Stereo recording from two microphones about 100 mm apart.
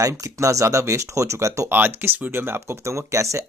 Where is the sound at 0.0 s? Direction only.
30° right (ahead or behind).